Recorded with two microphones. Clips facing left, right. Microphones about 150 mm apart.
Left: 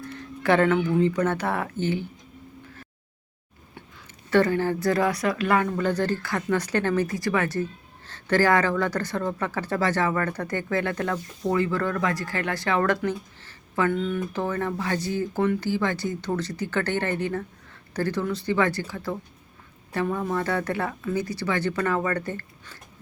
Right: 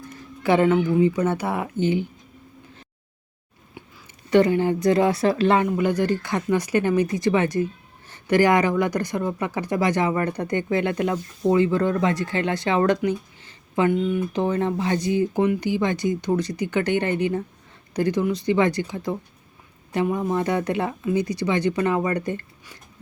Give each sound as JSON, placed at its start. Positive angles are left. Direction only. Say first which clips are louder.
{"t": 0.1, "sound": "speech", "louder": "right 2 dB", "side_deg": -15}
{"t": 4.3, "sound": "speech", "louder": "right 3 dB", "side_deg": -15}
{"t": 5.6, "sound": "speech", "louder": "right 3 dB", "side_deg": -10}